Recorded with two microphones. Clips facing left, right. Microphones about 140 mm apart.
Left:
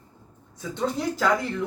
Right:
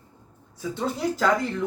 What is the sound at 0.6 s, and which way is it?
Speech, 5° right (ahead or behind).